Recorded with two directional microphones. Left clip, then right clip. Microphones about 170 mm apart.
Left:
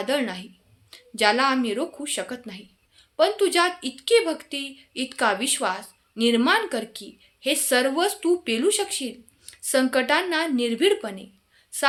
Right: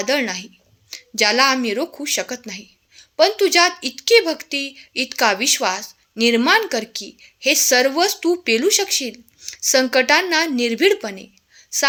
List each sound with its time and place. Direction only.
0.0 s speech: 30° right (ahead or behind)